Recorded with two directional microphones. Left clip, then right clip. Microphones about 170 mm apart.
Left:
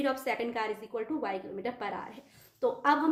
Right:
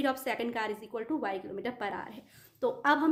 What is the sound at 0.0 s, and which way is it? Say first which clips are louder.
A woman's voice: left 1 dB; 35° right (ahead or behind).